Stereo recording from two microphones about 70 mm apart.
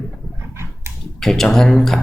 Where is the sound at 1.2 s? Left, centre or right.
Centre.